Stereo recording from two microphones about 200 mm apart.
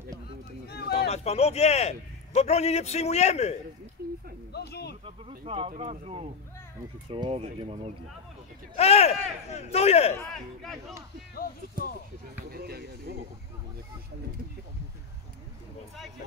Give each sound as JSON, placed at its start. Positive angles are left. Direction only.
{"t": 0.7, "sound": "a sound", "side_deg": 55}
{"t": 1.0, "sound": "a man's voice", "side_deg": 30}
{"t": 4.5, "sound": "a sound", "side_deg": 55}
{"t": 5.0, "sound": "speech", "side_deg": -30}
{"t": 8.7, "sound": "a man's voice", "side_deg": 30}
{"t": 10.1, "sound": "speech", "side_deg": 0}
{"t": 12.4, "sound": "speech", "side_deg": -50}